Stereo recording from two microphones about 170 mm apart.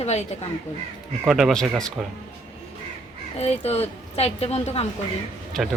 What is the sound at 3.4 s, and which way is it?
Speech, 40° left (ahead or behind).